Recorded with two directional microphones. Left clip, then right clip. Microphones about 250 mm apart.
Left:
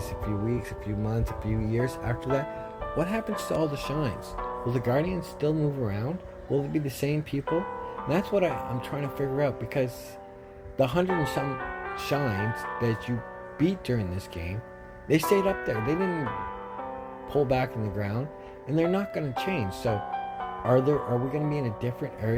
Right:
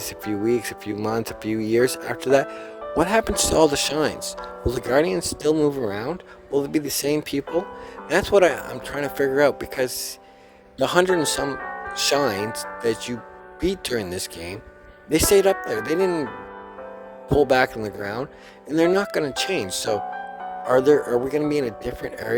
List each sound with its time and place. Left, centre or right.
0.0 s speech: right
17.3 s speech: right